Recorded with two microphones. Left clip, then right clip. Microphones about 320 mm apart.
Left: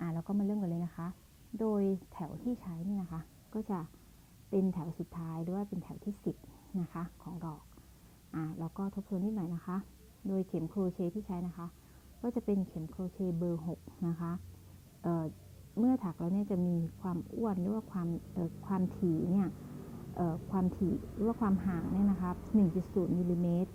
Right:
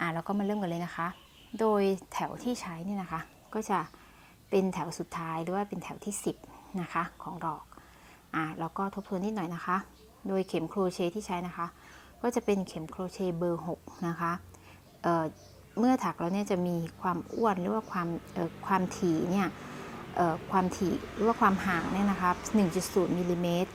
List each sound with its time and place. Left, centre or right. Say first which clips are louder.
0.0 s a woman's voice: right 7 dB; centre
6.7 s a woman's voice: right 11 dB; centre